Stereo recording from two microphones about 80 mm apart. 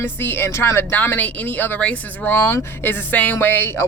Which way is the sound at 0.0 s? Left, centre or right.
Left.